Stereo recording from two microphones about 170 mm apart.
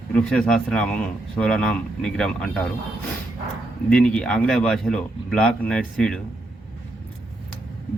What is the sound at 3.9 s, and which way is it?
A man's voice, 5° left (ahead or behind).